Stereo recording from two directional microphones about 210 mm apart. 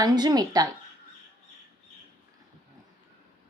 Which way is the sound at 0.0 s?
20° right (ahead or behind).